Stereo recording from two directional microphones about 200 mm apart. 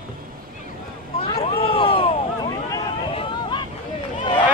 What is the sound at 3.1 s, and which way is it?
Vehicle, 25° left (ahead or behind).